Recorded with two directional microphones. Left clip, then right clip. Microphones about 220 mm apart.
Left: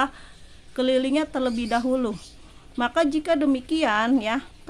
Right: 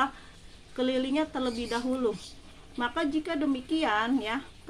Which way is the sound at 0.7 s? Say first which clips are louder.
Left 6 dB; 50° left (ahead or behind).